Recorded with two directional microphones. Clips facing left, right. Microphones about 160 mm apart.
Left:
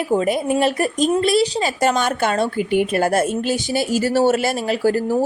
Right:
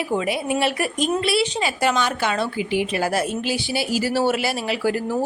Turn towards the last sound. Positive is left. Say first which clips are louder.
# left 4 dB
turn(degrees=45)  # may be behind; listen again after turning